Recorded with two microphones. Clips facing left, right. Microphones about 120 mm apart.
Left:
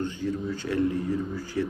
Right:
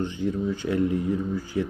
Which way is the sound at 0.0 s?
20° right (ahead or behind).